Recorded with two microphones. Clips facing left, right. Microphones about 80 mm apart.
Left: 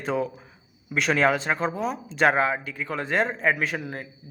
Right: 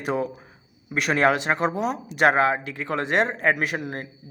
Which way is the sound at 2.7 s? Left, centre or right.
Right.